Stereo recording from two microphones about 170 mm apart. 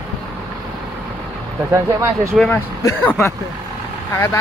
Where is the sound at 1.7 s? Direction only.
15° right (ahead or behind).